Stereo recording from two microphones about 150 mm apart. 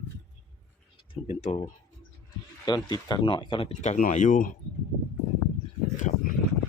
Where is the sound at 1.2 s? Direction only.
45° left (ahead or behind).